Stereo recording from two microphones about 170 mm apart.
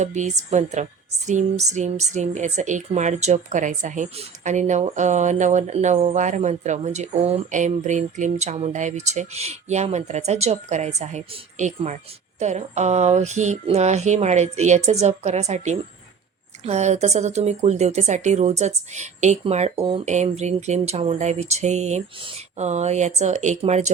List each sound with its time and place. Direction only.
0.0 s a woman's voice: 45° right (ahead or behind)